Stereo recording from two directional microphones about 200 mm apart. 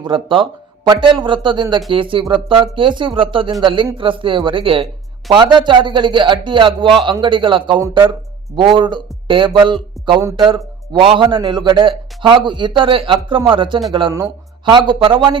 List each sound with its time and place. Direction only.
0.0 s a man's voice: 25° right (ahead or behind)